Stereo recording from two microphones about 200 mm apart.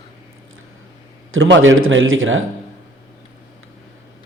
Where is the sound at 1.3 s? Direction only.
80° right.